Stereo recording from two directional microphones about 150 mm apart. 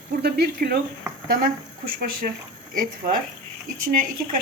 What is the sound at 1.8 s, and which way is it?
Speech, 75° right (ahead or behind).